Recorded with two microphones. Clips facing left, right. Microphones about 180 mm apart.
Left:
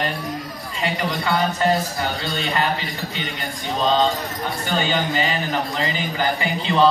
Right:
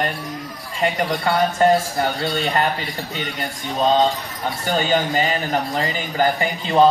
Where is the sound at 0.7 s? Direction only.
50° right (ahead or behind).